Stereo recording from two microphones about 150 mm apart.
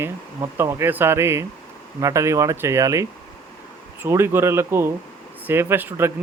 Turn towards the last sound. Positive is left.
turn(degrees=-15)  # may be behind; listen again after turning